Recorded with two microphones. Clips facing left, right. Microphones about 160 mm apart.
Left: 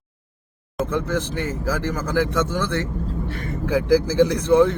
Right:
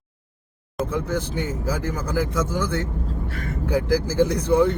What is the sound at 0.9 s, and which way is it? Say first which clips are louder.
Speech: left 2 dB; 90° left.